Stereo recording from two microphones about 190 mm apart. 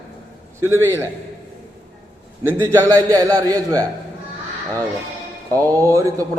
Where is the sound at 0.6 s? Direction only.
15° right (ahead or behind).